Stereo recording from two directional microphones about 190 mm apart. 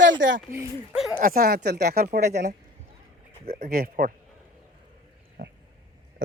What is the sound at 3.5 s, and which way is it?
Speech, 50° right (ahead or behind).